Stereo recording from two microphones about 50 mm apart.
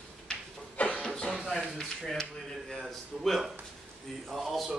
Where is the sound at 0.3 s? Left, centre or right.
Left.